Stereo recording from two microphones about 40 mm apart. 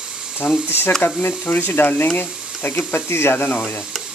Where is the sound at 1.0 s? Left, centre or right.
Left.